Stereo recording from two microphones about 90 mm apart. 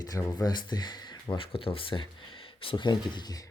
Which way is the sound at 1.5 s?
80° left.